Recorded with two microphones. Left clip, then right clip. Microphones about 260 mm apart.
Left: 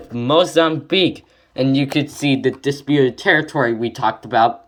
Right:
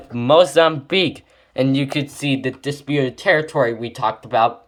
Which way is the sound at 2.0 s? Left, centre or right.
Right.